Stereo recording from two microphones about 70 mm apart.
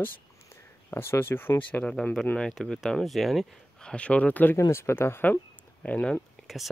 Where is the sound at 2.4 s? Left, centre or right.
Centre.